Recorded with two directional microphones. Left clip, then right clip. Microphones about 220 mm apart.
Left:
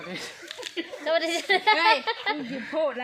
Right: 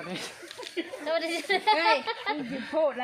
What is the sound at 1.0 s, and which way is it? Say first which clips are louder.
A woman's voice: left 5 dB; 35° left (ahead or behind).